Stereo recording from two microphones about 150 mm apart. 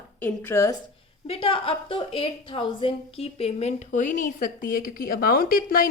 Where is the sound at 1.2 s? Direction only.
40° left (ahead or behind).